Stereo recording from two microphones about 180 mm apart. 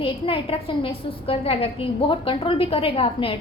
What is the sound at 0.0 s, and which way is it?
A woman's voice, 30° left (ahead or behind).